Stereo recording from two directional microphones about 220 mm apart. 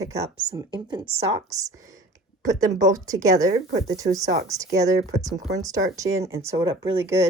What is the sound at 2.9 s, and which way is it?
Speech, 15° right (ahead or behind).